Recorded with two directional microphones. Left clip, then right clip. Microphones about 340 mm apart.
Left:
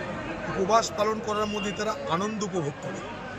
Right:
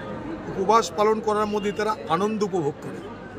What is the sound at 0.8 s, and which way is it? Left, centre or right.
Speech, centre.